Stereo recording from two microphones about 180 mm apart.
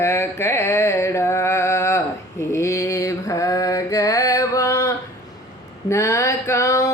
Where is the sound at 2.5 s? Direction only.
15° left (ahead or behind).